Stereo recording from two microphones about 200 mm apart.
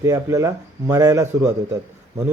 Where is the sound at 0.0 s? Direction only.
15° right (ahead or behind).